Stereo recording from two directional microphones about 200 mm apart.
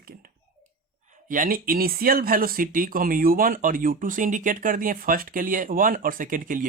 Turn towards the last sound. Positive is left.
turn(degrees=-45)  # may be behind; listen again after turning